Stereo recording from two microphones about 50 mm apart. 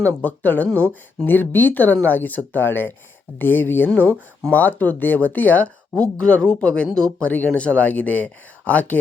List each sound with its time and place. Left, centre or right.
0.0 s speech: left
1.3 s speech: left
6.0 s speech: left